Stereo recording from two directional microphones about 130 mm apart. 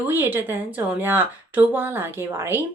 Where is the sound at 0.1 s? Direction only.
15° right (ahead or behind).